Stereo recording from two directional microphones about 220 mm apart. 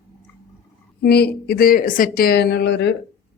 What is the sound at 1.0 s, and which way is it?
A woman's voice, 45° left (ahead or behind).